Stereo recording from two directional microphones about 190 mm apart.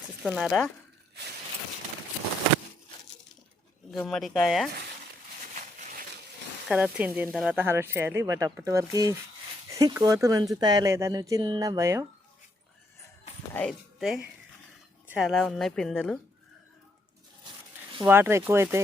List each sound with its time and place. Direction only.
0.2 s speech: 5° right (ahead or behind)
4.0 s speech: centre (ahead or behind)
6.7 s speech: 5° right (ahead or behind)
13.5 s speech: 5° left (ahead or behind)
18.0 s speech: 15° right (ahead or behind)